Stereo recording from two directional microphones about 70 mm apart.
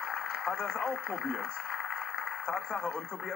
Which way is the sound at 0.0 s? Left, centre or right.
Centre.